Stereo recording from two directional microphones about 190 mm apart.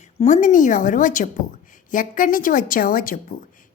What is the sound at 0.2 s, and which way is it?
A woman's voice, 40° left (ahead or behind).